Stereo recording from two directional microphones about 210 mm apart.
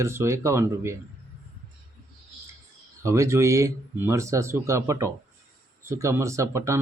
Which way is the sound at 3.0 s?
15° right (ahead or behind).